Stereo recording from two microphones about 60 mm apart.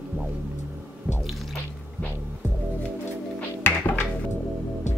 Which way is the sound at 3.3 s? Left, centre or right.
Left.